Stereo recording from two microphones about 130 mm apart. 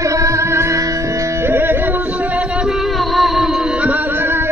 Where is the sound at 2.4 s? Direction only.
Centre (ahead or behind).